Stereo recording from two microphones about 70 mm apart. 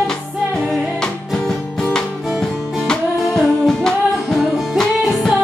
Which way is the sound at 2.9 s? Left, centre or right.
Centre.